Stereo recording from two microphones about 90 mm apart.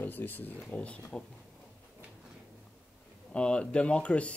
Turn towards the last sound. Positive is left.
turn(degrees=15)  # may be behind; listen again after turning